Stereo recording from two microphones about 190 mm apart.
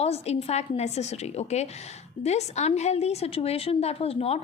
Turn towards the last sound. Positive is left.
turn(degrees=30)  # may be behind; listen again after turning